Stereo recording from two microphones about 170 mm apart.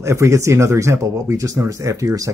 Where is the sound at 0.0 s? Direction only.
15° right (ahead or behind).